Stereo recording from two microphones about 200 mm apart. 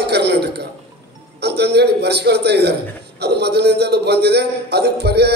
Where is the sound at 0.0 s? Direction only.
55° right (ahead or behind).